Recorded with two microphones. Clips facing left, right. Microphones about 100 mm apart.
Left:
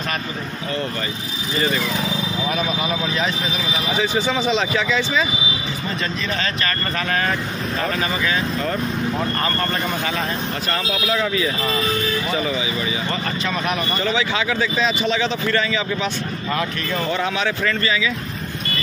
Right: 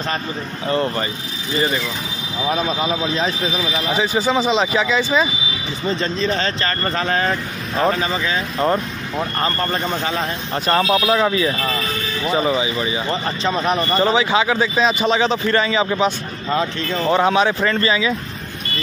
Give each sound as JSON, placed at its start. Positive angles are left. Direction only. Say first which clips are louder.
{"t": 2.5, "sound": "a man's voice", "louder": "right 5 dB", "side_deg": -30}
{"t": 10.7, "sound": "a man's voice", "louder": "right 8 dB", "side_deg": -35}
{"t": 17.1, "sound": "a man's voice", "louder": "right 9 dB", "side_deg": -35}